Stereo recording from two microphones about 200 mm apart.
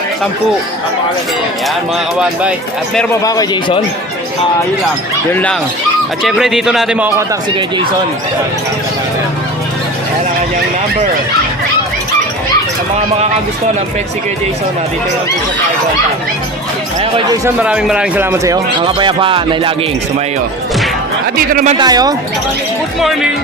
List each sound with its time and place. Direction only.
3.2 s a man's voice: 20° left (ahead or behind)
5.3 s speech: 5° left (ahead or behind)
17.4 s speech: 10° right (ahead or behind); by 19.7 s 25° right (ahead or behind)
21.3 s speech: 40° right (ahead or behind)
21.8 s speech: 20° right (ahead or behind)
23.0 s speech: centre (ahead or behind)